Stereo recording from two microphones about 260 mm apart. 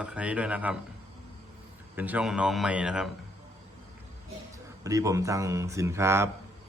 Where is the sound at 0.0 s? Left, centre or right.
Centre.